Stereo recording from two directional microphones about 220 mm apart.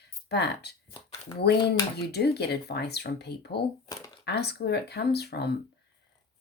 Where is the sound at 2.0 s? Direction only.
45° left (ahead or behind).